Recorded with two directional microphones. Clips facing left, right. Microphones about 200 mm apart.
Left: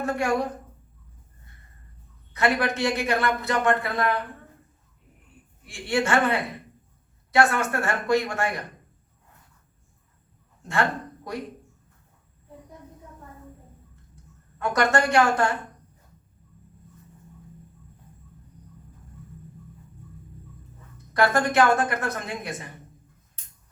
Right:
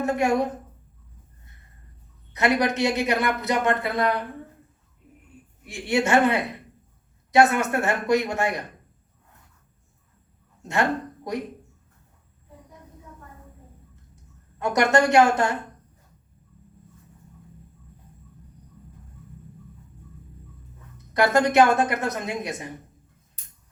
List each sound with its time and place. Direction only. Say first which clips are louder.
0.0 s a man's voice: right 3 dB; 20° right (ahead or behind)
2.3 s a man's voice: right 2 dB; 20° right (ahead or behind)
5.6 s a man's voice: right 2 dB; 20° right (ahead or behind)
10.6 s speech: right 2 dB; 20° right (ahead or behind)
14.6 s a man's voice: right 3 dB; 20° right (ahead or behind)
21.1 s a man's voice: right 2 dB; 20° right (ahead or behind)